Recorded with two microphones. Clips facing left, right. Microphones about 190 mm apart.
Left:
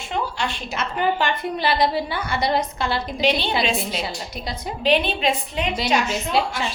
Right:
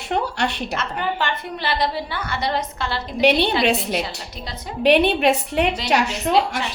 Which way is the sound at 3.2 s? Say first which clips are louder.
Right 5 dB; 65° right (ahead or behind).